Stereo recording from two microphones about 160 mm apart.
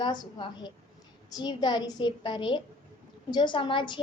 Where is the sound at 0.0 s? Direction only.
30° left (ahead or behind).